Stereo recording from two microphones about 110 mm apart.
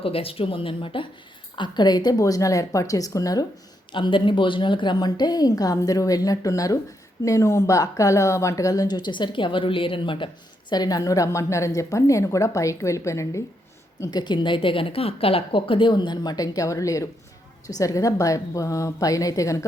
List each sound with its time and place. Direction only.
0.0 s speech: 60° left (ahead or behind)
1.5 s speech: 45° left (ahead or behind)
3.9 s speech: 50° left (ahead or behind)
10.7 s a woman's voice: 35° left (ahead or behind)
14.0 s a woman's voice: 40° left (ahead or behind)